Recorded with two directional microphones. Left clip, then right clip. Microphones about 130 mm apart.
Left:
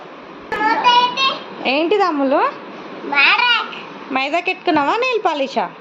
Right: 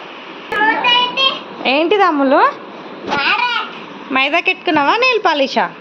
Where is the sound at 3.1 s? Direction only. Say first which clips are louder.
Left 3 dB; 10° left (ahead or behind).